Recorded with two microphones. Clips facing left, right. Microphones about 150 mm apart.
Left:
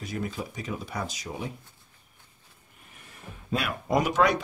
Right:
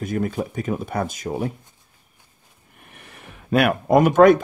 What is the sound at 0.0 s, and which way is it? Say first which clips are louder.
Speech: right 9 dB; 50° right (ahead or behind).